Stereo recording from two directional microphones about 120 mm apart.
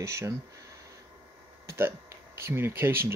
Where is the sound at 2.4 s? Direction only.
20° right (ahead or behind).